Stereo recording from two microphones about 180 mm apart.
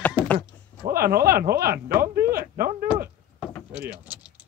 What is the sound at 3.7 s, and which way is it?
Vehicle, 5° right (ahead or behind).